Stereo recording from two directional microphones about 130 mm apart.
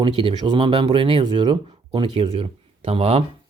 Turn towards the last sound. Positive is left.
turn(degrees=-50)  # may be behind; listen again after turning